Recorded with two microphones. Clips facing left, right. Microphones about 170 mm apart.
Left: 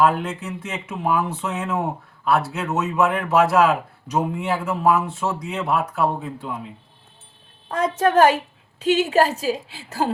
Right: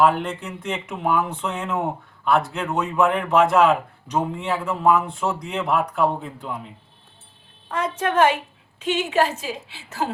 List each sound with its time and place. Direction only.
0.0 s a man's voice: centre (ahead or behind)
7.7 s a woman's voice: 40° left (ahead or behind)